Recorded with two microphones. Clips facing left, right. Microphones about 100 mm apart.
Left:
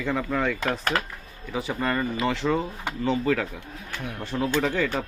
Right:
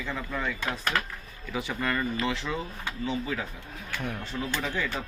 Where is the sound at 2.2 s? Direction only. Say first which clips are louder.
Left 6 dB; 50° left (ahead or behind); by 3.4 s 70° left (ahead or behind).